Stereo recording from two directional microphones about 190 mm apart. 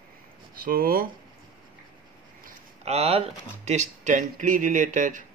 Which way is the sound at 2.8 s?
35° right (ahead or behind).